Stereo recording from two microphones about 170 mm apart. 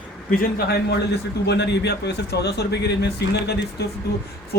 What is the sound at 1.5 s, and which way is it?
A man's voice, 85° left.